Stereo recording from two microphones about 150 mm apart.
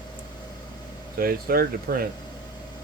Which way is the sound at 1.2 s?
85° right.